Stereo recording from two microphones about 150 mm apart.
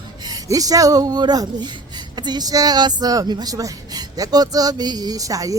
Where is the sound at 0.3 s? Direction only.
25° right (ahead or behind).